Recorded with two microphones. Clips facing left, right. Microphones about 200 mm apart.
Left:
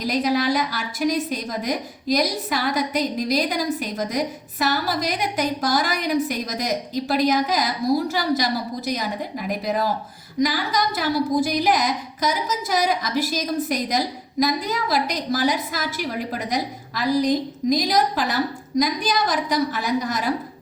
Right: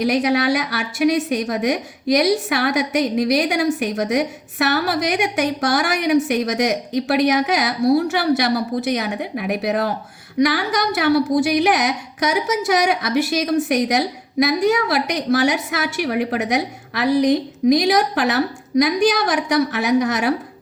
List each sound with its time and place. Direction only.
0.0 s a woman's voice: 75° right (ahead or behind)